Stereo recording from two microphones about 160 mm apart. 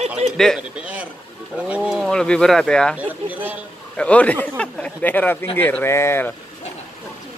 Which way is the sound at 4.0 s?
10° left (ahead or behind).